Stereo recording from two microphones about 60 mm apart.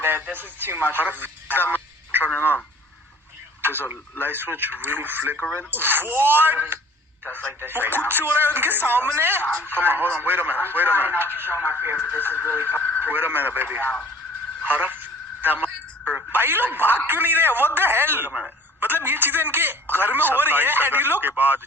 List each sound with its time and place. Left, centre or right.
0.0 s speech: right
4.2 s a man's voice: right
12.3 s a man's voice: left
13.0 s a man's voice: right
14.6 s telephone: right
16.3 s a man's voice: right